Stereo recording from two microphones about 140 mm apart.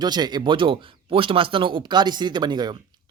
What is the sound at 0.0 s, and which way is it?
Speech, 30° right (ahead or behind).